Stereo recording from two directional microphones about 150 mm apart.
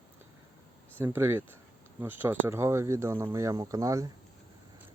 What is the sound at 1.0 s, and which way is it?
Speech, 15° right (ahead or behind).